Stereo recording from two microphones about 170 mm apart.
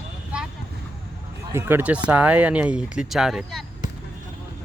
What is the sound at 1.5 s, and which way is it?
Speech, 10° right (ahead or behind).